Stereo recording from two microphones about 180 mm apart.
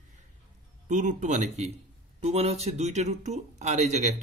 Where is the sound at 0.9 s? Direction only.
45° right (ahead or behind).